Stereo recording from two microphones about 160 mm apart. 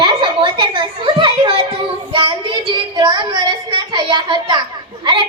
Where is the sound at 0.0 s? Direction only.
30° right (ahead or behind).